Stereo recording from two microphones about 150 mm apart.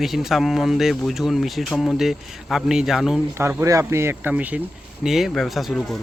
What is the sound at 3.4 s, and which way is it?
Speech, 20° right (ahead or behind).